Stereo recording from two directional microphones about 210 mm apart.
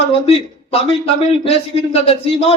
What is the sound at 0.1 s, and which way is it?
A man's voice, 25° left (ahead or behind).